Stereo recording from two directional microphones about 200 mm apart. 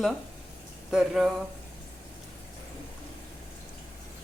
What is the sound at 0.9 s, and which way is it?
Speech, centre (ahead or behind).